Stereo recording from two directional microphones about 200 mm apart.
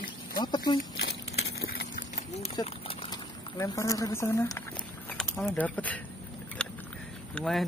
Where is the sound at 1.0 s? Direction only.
55° left (ahead or behind).